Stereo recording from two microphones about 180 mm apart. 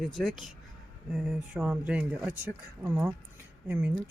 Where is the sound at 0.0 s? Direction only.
Centre (ahead or behind).